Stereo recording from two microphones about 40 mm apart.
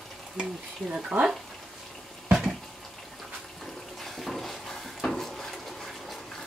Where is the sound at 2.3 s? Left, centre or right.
Centre.